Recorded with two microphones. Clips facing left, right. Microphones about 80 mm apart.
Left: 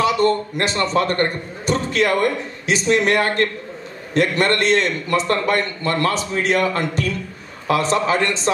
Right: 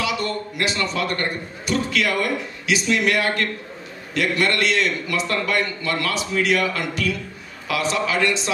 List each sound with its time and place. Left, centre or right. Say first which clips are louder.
0.0 s a man's voice: left 8 dB; left